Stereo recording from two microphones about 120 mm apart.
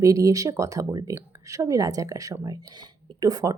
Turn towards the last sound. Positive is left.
turn(degrees=-30)  # may be behind; listen again after turning